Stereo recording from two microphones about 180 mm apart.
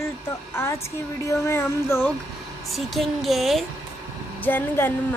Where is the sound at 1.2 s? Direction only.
15° left (ahead or behind).